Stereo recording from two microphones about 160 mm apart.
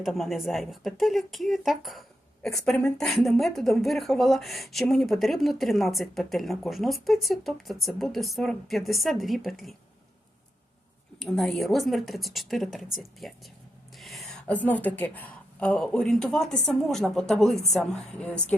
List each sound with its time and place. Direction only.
0.0 s speech: centre (ahead or behind)
11.2 s speech: centre (ahead or behind)
13.9 s a sound: centre (ahead or behind)
15.6 s a woman's voice: 5° left (ahead or behind)